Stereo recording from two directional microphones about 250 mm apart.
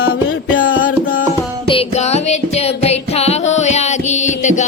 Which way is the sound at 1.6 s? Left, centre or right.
Left.